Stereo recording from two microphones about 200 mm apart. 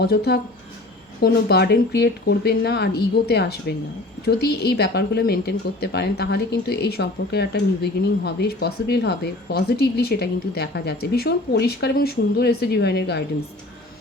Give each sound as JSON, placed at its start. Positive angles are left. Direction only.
{"t": 0.0, "sound": "a woman's voice", "side_deg": 55}